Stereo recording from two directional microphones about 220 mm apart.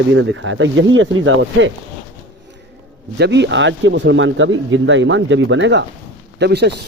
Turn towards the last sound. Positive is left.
turn(degrees=-50)  # may be behind; listen again after turning